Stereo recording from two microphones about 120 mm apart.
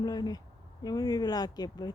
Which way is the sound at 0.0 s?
35° left (ahead or behind).